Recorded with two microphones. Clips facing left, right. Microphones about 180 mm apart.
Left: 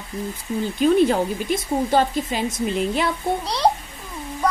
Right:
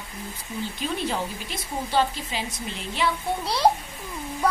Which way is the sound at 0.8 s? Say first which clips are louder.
Left 13 dB; 50° left (ahead or behind).